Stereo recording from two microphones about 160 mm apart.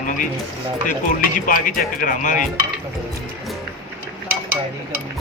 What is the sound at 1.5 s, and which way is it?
Speech, 60° left (ahead or behind).